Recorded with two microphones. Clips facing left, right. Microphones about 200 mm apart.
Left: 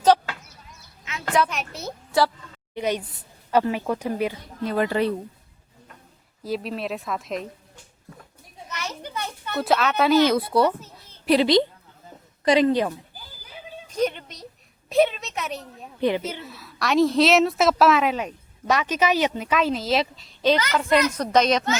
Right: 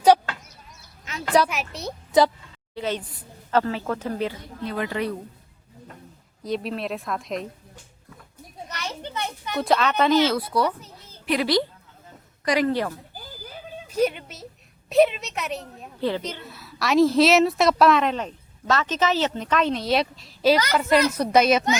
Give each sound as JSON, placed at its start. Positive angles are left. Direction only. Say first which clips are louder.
{"t": 1.0, "sound": "a sound", "louder": "right 2 dB", "side_deg": -35}
{"t": 1.5, "sound": "a woman's voice", "louder": "right 1 dB", "side_deg": 0}
{"t": 2.1, "sound": "speech", "louder": "right 3 dB", "side_deg": -20}
{"t": 2.7, "sound": "a woman's voice", "louder": "left 2 dB", "side_deg": 15}
{"t": 4.6, "sound": "a woman's voice", "louder": "left 5 dB", "side_deg": 45}
{"t": 6.4, "sound": "a woman's voice", "louder": "even", "side_deg": 0}
{"t": 8.9, "sound": "children playing", "louder": "right 3 dB", "side_deg": -25}
{"t": 9.6, "sound": "a woman's voice", "louder": "even", "side_deg": 5}
{"t": 10.2, "sound": "a woman's voice", "louder": "left 3 dB", "side_deg": 25}
{"t": 13.8, "sound": "speech", "louder": "right 2 dB", "side_deg": -10}
{"t": 14.8, "sound": "a sound", "louder": "right 2 dB", "side_deg": 0}
{"t": 16.0, "sound": "speech", "louder": "left 3 dB", "side_deg": 15}
{"t": 16.4, "sound": "a woman's voice", "louder": "even", "side_deg": 0}